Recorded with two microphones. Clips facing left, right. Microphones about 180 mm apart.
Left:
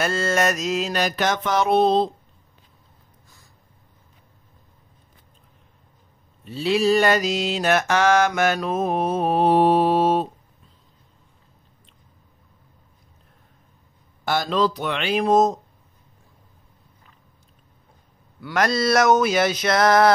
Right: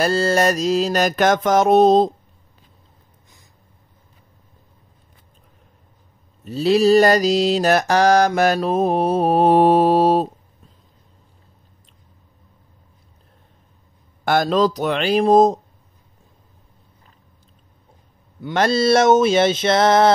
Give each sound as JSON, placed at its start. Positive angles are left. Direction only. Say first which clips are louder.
{"t": 0.0, "sound": "mantra", "louder": "right 4 dB", "side_deg": -35}
{"t": 6.4, "sound": "mantra", "louder": "right 5 dB", "side_deg": -40}
{"t": 14.2, "sound": "mantra", "louder": "right 5 dB", "side_deg": -50}
{"t": 18.4, "sound": "a sound", "louder": "right 4 dB", "side_deg": -30}